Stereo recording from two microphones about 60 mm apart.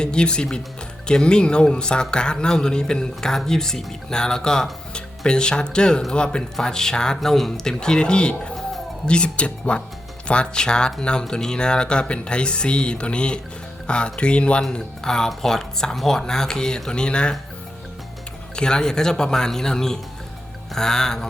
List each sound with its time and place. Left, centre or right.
0.0 s speech: centre
18.5 s speech: centre